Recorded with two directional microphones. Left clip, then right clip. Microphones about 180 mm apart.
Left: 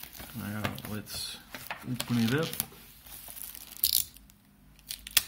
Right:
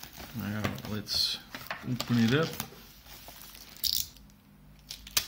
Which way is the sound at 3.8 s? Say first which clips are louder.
Even; 30° left (ahead or behind).